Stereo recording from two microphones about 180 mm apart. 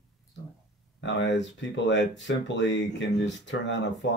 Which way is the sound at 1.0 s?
85° left.